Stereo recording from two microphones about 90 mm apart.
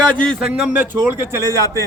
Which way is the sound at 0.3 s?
5° right (ahead or behind).